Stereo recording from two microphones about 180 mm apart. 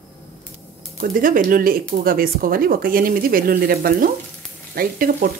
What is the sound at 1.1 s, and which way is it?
Speech, 50° right (ahead or behind).